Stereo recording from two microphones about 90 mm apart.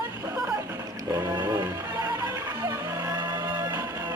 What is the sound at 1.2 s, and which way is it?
Music, 45° right (ahead or behind).